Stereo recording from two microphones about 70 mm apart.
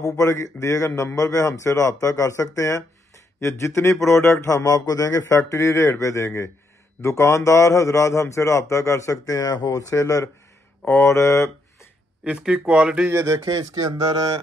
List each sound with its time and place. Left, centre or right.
0.0 s speech: left
12.3 s speech: centre
13.1 s speech: right